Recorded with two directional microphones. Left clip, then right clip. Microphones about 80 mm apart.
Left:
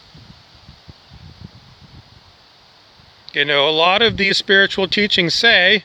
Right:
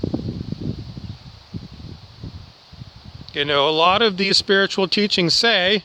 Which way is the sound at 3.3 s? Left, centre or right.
Centre.